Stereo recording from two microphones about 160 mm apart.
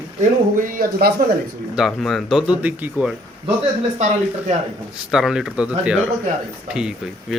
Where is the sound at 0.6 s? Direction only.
65° right (ahead or behind).